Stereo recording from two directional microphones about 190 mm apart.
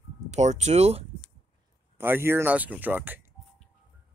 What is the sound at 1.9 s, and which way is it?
Speech, 10° right (ahead or behind).